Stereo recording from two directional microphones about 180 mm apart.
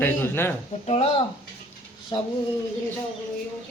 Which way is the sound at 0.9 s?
35° left (ahead or behind).